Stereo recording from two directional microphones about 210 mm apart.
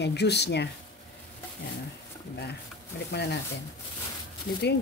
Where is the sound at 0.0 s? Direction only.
50° left (ahead or behind).